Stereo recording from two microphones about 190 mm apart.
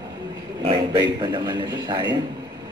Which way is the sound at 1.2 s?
20° right (ahead or behind).